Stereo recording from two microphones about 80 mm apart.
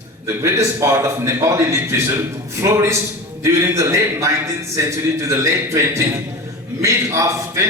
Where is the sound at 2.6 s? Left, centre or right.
Right.